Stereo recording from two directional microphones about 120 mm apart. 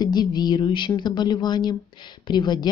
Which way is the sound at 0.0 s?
35° left (ahead or behind).